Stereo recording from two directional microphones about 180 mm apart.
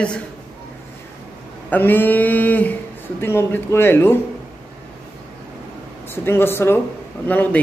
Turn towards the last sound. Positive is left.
turn(degrees=10)  # may be behind; listen again after turning